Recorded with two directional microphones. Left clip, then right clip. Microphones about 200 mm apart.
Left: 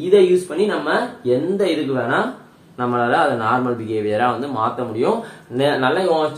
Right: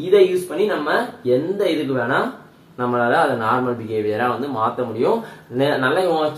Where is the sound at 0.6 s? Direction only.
30° left (ahead or behind).